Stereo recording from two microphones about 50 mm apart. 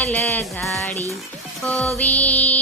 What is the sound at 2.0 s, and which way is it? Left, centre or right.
Speech, left.